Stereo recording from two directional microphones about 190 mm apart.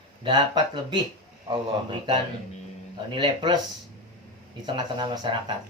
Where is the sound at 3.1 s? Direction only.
25° right (ahead or behind).